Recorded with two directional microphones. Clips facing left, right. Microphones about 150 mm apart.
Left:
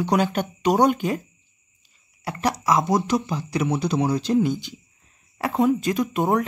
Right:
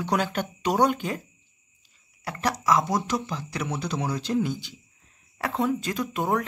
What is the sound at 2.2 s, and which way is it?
Speech, 15° left (ahead or behind).